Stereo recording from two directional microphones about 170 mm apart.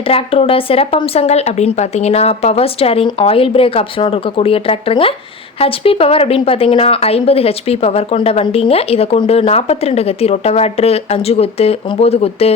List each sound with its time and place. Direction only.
0.1 s speech: 35° left (ahead or behind)